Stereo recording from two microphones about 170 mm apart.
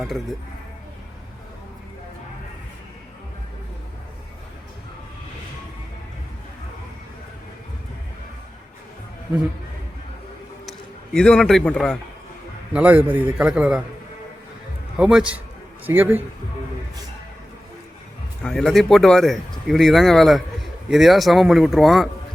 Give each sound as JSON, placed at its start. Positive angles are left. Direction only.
{"t": 10.7, "sound": "a man's voice", "side_deg": 5}
{"t": 12.7, "sound": "a man's voice", "side_deg": -10}
{"t": 14.9, "sound": "a man's voice", "side_deg": -5}
{"t": 18.4, "sound": "speech", "side_deg": 0}